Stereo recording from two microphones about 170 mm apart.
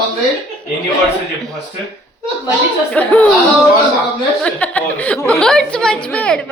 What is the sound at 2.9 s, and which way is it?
Speech, 10° left (ahead or behind).